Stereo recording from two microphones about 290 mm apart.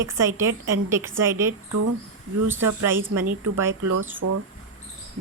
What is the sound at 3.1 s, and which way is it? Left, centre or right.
Speech, right.